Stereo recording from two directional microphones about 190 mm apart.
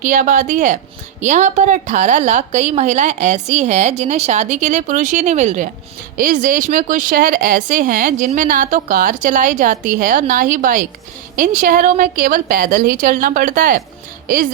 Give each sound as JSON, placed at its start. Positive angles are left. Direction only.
{"t": 0.0, "sound": "a woman's voice", "side_deg": -45}